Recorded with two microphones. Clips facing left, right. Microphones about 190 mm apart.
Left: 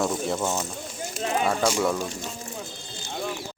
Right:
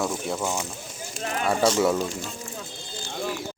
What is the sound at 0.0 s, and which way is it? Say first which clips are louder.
Speech: left 2 dB; centre (ahead or behind).